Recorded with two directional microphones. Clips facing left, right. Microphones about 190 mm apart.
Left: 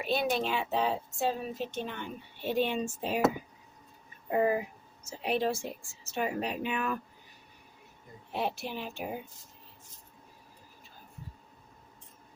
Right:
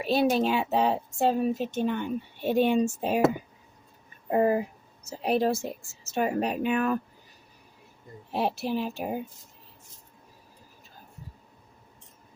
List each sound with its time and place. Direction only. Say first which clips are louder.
0.0 s a woman's voice: right 6 dB; 35° right (ahead or behind)
4.3 s a woman's voice: right 4 dB; 35° right (ahead or behind)
8.3 s a woman's voice: right 6 dB; 35° right (ahead or behind)